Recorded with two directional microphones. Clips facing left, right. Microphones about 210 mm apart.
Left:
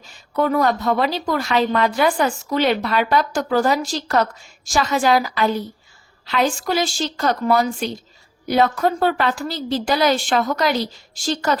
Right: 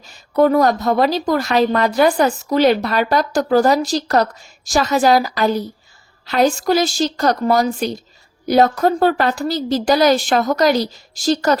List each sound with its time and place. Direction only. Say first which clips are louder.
0.0 s a woman's voice: right 6 dB; 40° right (ahead or behind)